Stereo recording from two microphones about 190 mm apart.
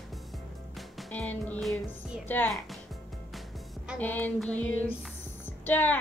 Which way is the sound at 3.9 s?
10° left (ahead or behind).